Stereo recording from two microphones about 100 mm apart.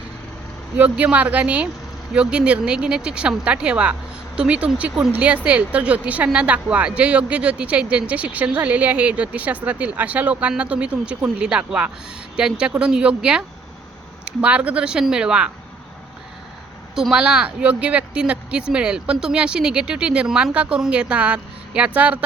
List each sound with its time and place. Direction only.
0.8 s speech: 15° right (ahead or behind)
16.9 s speech: 5° right (ahead or behind)